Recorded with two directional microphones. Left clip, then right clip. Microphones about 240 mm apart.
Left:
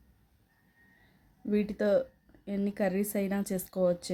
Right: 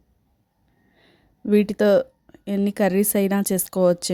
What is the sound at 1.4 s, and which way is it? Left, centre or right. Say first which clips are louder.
Speech: right 11 dB; right.